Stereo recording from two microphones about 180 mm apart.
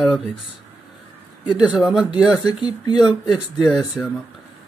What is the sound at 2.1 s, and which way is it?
Speech, 20° left (ahead or behind).